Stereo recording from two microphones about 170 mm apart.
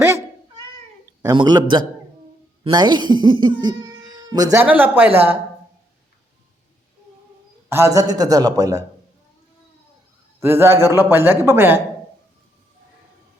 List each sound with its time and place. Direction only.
0.0 s cat: 20° right (ahead or behind)
1.2 s a man's voice: 25° right (ahead or behind)
4.7 s speech: 10° right (ahead or behind)
7.7 s a man's voice: 15° right (ahead or behind)
10.4 s speech: 15° right (ahead or behind)